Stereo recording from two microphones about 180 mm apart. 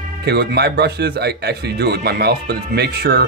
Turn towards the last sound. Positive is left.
turn(degrees=-60)  # may be behind; listen again after turning